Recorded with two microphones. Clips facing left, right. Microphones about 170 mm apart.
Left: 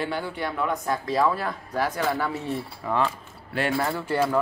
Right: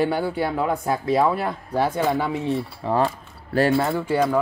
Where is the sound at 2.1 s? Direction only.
15° right (ahead or behind).